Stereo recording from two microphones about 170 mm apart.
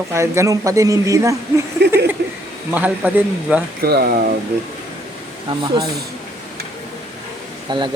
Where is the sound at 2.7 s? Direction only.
10° right (ahead or behind).